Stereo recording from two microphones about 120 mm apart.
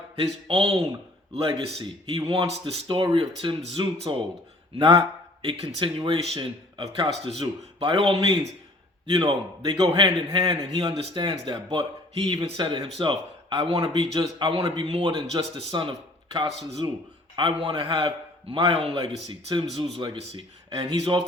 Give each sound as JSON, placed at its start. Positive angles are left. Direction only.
{"t": 0.2, "sound": "speech", "side_deg": -50}
{"t": 3.9, "sound": "speech", "side_deg": -55}
{"t": 4.8, "sound": "speech", "side_deg": -40}
{"t": 7.8, "sound": "speech", "side_deg": -45}
{"t": 10.6, "sound": "a man's voice", "side_deg": -40}
{"t": 12.5, "sound": "speech", "side_deg": -45}
{"t": 13.7, "sound": "speech", "side_deg": -55}
{"t": 14.1, "sound": "speech", "side_deg": -40}
{"t": 15.1, "sound": "speech", "side_deg": -30}
{"t": 15.8, "sound": "speech", "side_deg": -45}